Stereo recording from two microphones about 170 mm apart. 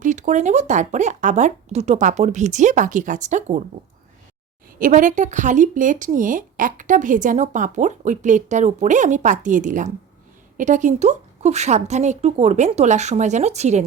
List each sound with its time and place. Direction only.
0.0 s speech: 45° right (ahead or behind)
4.8 s speech: 50° right (ahead or behind)